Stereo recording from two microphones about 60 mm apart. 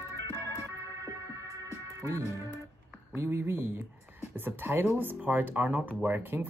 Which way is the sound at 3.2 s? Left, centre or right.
Right.